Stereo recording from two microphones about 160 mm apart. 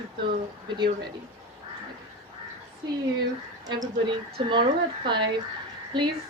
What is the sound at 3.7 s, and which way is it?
A woman's voice, 30° right (ahead or behind).